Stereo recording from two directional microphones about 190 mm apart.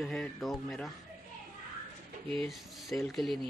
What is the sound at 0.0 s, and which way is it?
Speech, centre (ahead or behind).